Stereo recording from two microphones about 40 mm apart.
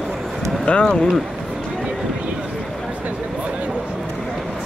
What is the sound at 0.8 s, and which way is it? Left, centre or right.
Speech, centre.